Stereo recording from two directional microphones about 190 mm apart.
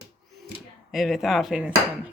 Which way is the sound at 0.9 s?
Centre (ahead or behind).